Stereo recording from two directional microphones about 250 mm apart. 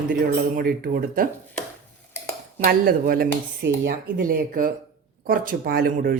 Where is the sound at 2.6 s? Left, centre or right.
Right.